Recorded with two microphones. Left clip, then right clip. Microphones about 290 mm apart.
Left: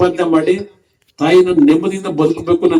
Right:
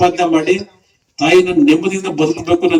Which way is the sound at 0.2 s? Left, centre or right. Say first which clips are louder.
Even; centre.